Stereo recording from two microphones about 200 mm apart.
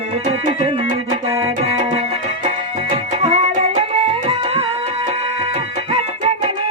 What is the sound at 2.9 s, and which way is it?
Music, 30° right (ahead or behind).